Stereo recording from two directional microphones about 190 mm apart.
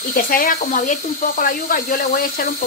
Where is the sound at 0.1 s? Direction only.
45° left (ahead or behind).